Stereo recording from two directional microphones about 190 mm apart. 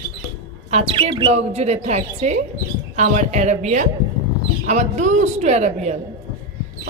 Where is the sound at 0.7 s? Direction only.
30° right (ahead or behind).